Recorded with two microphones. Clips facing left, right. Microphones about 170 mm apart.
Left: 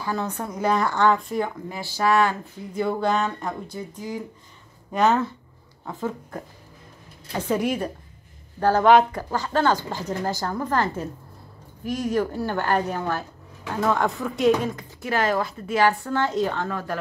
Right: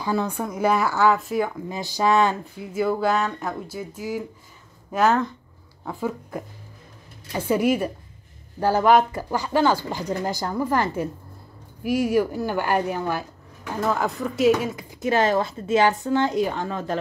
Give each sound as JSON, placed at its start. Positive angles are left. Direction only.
{"t": 0.0, "sound": "speech", "side_deg": -15}
{"t": 1.7, "sound": "speech", "side_deg": -15}
{"t": 2.7, "sound": "speech", "side_deg": -5}
{"t": 5.9, "sound": "speech", "side_deg": -10}
{"t": 15.0, "sound": "speech", "side_deg": -20}